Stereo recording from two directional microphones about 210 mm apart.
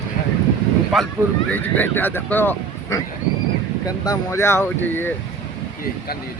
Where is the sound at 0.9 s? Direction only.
Centre (ahead or behind).